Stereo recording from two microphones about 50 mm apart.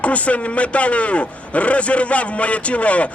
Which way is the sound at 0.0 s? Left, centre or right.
Left.